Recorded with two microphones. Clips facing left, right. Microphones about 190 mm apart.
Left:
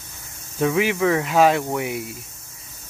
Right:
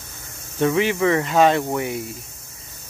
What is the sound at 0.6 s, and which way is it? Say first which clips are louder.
Speech: right 1 dB; 5° left (ahead or behind).